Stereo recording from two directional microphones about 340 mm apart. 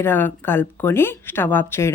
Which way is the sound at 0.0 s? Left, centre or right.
Centre.